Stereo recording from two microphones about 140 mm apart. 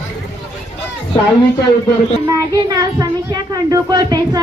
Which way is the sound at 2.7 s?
25° right (ahead or behind).